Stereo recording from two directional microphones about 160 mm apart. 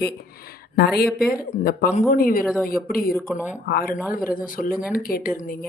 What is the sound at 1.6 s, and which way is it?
Speech, 65° left (ahead or behind).